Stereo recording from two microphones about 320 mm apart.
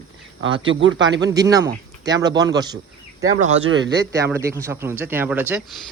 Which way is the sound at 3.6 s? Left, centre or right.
Right.